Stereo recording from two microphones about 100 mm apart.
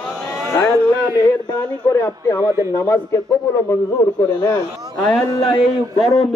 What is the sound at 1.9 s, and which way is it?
A man's voice, 30° left (ahead or behind).